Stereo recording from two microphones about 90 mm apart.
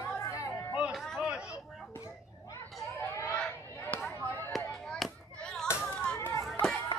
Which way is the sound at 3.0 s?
35° left (ahead or behind).